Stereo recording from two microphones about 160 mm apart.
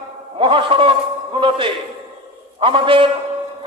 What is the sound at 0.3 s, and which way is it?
A man's voice, 30° right (ahead or behind).